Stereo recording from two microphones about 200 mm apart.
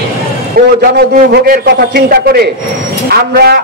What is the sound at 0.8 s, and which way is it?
A man's voice, 50° right (ahead or behind).